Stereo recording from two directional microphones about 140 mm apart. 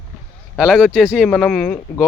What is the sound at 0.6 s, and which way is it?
Speech, centre (ahead or behind).